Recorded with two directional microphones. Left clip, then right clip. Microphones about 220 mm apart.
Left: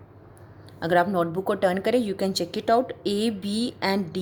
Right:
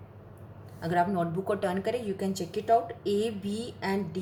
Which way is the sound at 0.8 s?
40° left (ahead or behind).